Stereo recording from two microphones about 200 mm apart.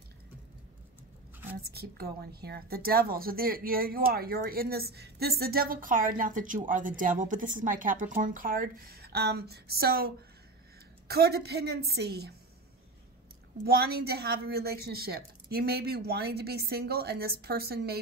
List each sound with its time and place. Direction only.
1.7 s a woman's voice: 50° right (ahead or behind)
13.7 s a woman's voice: 50° right (ahead or behind)